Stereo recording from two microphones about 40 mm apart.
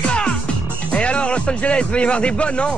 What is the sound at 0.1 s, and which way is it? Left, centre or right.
Music, left.